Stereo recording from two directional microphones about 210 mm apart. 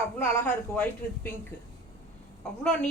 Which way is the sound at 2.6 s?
5° left (ahead or behind).